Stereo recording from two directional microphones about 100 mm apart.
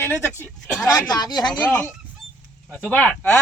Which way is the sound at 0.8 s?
40° left (ahead or behind).